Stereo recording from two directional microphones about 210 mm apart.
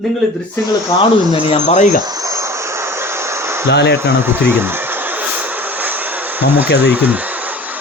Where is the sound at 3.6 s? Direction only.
55° left (ahead or behind).